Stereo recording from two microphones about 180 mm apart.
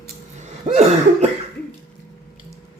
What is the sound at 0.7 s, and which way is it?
Cough, 40° right (ahead or behind).